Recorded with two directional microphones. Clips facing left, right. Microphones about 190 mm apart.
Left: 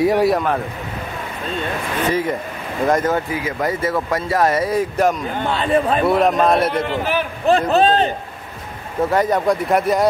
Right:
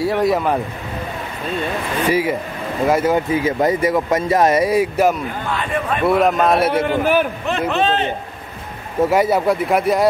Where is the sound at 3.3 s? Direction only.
25° right (ahead or behind); by 5.1 s 10° right (ahead or behind).